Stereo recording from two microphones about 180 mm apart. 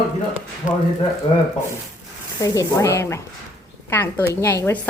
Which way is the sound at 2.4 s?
20° left (ahead or behind).